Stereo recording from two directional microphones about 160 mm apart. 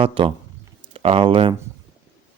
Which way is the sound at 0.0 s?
35° right (ahead or behind).